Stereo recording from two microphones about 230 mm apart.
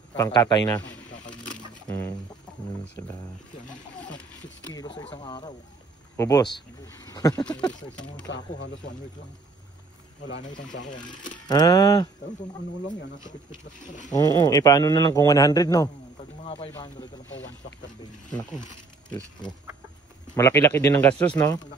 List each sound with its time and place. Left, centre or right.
0.2 s a man's voice: centre
1.9 s chicken: centre
4.7 s a man's voice: centre
7.4 s speech: centre
8.5 s speech: left
10.7 s speech: left
11.4 s a man's voice: centre
13.7 s speech: left
14.1 s a man's voice: centre
17.3 s speech: left
20.3 s a man's voice: centre